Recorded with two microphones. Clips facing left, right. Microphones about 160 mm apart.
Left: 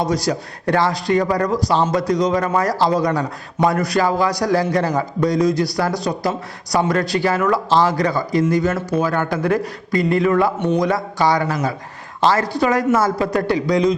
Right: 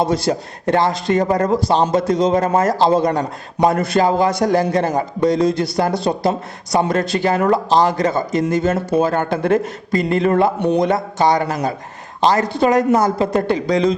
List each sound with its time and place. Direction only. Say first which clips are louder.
0.0 s speech: right 2 dB; 25° right (ahead or behind)